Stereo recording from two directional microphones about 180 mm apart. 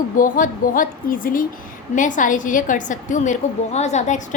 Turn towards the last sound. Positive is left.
turn(degrees=40)  # may be behind; listen again after turning